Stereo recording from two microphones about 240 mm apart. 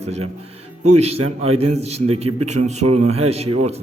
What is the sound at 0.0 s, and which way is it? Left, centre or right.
Speech, right.